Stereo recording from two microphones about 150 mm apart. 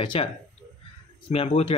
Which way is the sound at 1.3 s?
40° left (ahead or behind).